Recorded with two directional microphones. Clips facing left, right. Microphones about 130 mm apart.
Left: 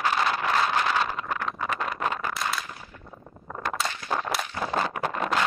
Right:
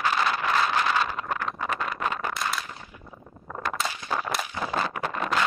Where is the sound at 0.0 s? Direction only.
35° left (ahead or behind).